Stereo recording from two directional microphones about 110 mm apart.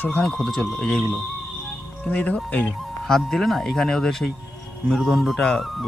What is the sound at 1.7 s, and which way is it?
Music, 10° left (ahead or behind).